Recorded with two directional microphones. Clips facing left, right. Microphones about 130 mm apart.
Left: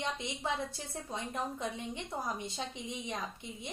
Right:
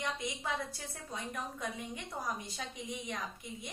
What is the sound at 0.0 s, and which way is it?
A woman's voice, 25° left (ahead or behind).